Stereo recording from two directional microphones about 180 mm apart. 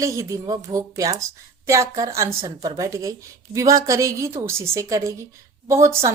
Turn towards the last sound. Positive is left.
turn(degrees=-15)  # may be behind; listen again after turning